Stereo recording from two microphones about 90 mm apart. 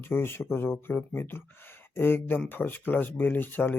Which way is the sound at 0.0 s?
25° left (ahead or behind).